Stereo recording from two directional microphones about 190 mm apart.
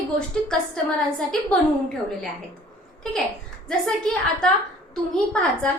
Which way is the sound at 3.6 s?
5° left (ahead or behind).